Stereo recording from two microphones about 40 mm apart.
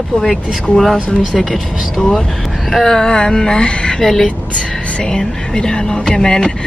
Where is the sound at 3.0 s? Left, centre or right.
Centre.